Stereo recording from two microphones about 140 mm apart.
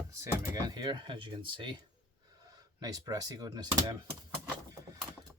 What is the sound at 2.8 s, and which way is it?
Speech, 25° right (ahead or behind).